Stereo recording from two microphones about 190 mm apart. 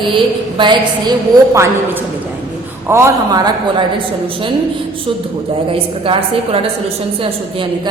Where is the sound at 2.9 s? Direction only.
15° right (ahead or behind).